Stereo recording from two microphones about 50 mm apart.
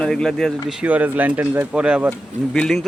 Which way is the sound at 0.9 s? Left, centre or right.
Right.